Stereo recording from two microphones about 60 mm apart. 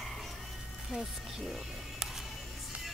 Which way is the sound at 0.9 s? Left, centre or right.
Centre.